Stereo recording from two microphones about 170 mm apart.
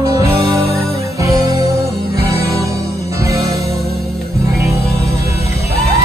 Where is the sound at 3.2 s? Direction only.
20° right (ahead or behind).